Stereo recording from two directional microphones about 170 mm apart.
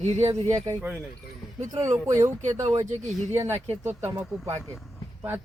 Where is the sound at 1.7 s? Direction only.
20° right (ahead or behind).